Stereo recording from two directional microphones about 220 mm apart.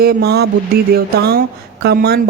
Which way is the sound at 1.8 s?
45° right (ahead or behind).